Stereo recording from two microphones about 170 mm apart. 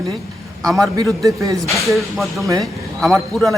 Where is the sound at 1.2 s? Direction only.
20° right (ahead or behind).